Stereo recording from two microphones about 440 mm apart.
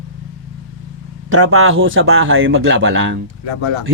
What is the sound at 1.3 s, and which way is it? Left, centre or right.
A man's voice, right.